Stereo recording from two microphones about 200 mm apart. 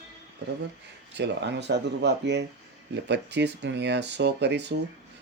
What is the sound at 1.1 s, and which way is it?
Speech, 60° right (ahead or behind).